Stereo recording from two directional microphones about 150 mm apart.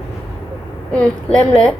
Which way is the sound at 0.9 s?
5° left (ahead or behind).